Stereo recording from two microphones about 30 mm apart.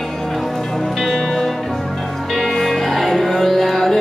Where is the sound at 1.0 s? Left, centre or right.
Centre.